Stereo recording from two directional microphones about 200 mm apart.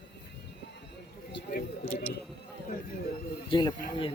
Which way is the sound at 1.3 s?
50° left (ahead or behind).